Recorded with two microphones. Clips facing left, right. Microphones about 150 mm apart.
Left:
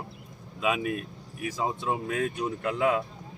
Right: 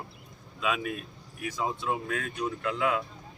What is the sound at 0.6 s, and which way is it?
Speech, 15° left (ahead or behind).